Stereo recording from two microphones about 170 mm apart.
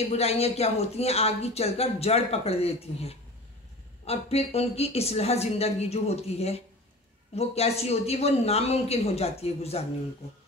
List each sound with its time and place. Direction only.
0.1 s speech: 35° left (ahead or behind)